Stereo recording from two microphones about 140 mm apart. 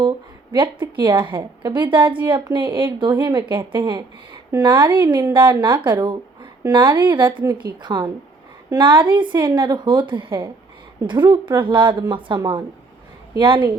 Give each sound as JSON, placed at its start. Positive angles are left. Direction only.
{"t": 0.5, "sound": "a woman's voice", "side_deg": -35}